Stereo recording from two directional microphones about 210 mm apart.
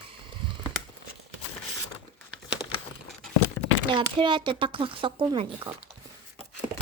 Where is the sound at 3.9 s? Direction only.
25° right (ahead or behind).